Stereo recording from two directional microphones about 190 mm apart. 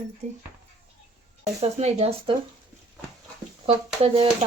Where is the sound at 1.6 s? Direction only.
35° right (ahead or behind).